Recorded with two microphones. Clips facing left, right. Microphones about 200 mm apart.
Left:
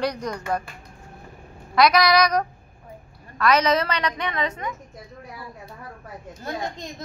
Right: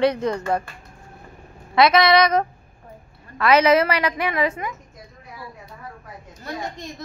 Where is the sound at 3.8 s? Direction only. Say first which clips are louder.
Right 4 dB; 5° right (ahead or behind).